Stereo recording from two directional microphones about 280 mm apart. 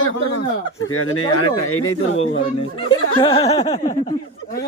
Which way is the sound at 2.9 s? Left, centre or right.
Centre.